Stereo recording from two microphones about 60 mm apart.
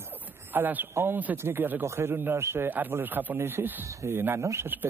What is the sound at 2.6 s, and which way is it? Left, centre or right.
Speech, right.